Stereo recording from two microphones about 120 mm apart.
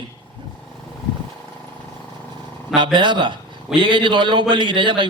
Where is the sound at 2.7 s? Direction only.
40° right (ahead or behind).